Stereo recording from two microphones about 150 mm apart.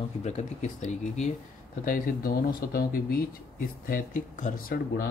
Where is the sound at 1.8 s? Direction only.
70° left (ahead or behind).